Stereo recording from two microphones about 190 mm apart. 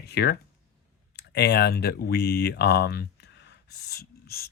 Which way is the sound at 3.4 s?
55° left (ahead or behind).